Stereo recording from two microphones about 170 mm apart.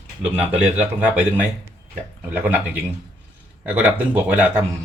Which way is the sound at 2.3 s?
10° right (ahead or behind).